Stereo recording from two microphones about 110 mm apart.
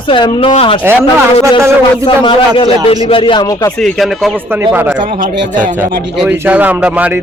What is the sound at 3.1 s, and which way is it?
Speech, 50° left (ahead or behind).